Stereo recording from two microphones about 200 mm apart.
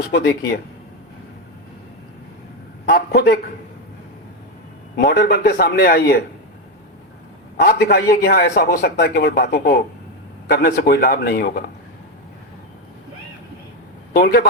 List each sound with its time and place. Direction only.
0.1 s speech: 55° left (ahead or behind)
2.8 s a man's voice: 50° left (ahead or behind)
4.9 s a man's voice: 55° left (ahead or behind)
7.5 s a man's voice: 45° left (ahead or behind)
14.1 s a man's voice: 50° left (ahead or behind)